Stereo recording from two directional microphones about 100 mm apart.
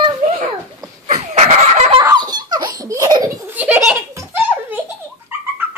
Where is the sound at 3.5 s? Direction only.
15° right (ahead or behind).